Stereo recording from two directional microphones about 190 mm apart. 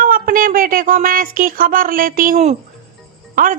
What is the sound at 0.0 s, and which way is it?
A woman's voice, 45° right (ahead or behind).